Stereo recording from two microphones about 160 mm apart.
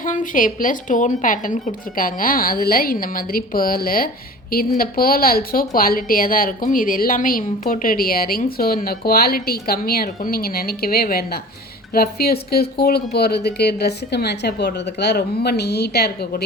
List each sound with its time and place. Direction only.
0.0 s a woman's voice: 55° left (ahead or behind); by 16.4 s 85° left